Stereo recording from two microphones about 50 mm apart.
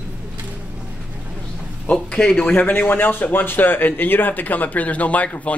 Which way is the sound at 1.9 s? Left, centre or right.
Left.